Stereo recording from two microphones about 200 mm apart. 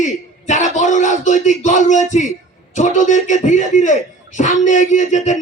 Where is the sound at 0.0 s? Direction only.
35° left (ahead or behind).